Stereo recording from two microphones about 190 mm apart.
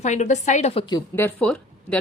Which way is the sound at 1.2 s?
10° left (ahead or behind).